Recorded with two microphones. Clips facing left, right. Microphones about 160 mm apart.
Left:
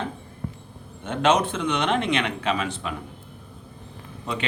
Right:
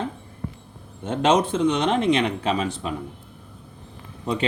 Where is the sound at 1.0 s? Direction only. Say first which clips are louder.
Right 1 dB; 40° right (ahead or behind).